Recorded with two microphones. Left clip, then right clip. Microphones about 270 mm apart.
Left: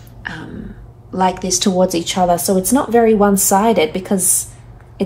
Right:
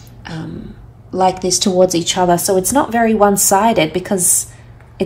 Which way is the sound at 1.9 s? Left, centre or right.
Right.